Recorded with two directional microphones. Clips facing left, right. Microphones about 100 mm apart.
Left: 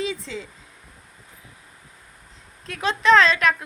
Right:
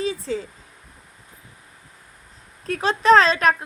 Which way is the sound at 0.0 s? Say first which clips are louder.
Right 4 dB; 40° right (ahead or behind).